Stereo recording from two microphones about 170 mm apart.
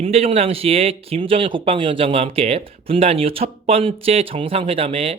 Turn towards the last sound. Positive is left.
turn(degrees=-35)  # may be behind; listen again after turning